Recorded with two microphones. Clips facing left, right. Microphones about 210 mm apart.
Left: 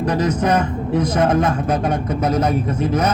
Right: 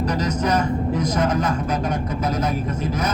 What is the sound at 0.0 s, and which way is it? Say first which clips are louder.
Speech: left 4 dB; 55° left (ahead or behind).